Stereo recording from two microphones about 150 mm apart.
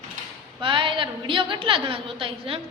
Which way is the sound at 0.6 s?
35° right (ahead or behind).